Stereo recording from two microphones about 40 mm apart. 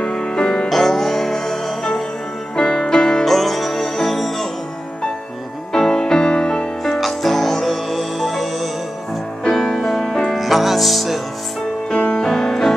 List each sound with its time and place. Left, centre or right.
0.0 s music: left
0.7 s music: centre
2.5 s music: left
3.3 s music: centre
5.7 s music: centre
6.8 s music: centre
12.1 s music: centre